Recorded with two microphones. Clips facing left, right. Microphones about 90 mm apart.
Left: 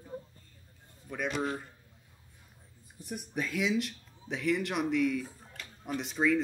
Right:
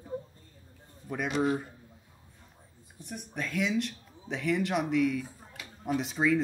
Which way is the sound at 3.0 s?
5° left (ahead or behind).